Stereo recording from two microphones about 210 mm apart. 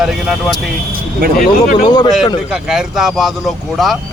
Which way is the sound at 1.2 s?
45° right (ahead or behind).